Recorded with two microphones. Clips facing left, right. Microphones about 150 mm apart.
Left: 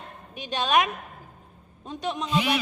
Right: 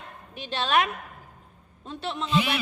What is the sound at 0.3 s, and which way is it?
Speech, 15° left (ahead or behind).